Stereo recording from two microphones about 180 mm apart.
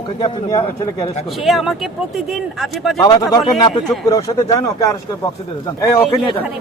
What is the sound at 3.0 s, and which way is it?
Speech, 20° left (ahead or behind).